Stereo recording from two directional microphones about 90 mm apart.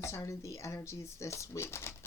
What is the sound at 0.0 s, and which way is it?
Speech, 30° left (ahead or behind).